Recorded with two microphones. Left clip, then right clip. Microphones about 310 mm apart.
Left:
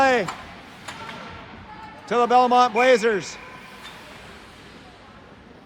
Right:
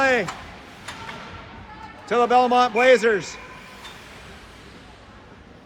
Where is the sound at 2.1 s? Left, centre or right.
Centre.